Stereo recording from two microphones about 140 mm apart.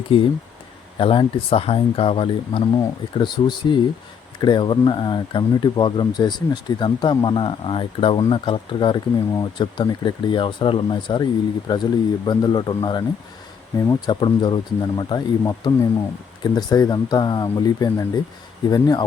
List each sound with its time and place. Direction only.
0.1 s speech: 40° left (ahead or behind)